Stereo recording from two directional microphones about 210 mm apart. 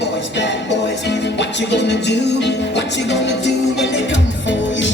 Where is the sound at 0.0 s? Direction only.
60° left (ahead or behind).